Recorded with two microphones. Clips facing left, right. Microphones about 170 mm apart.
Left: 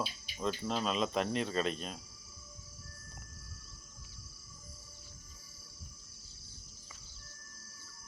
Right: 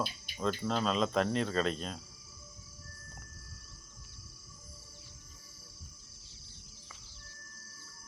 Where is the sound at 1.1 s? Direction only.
35° right (ahead or behind).